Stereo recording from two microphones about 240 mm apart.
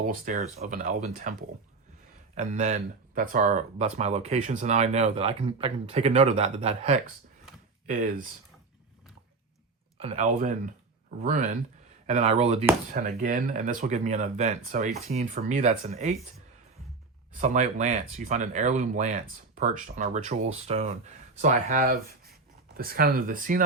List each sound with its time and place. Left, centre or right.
0.1 s speech: right
10.0 s speech: right
17.3 s speech: right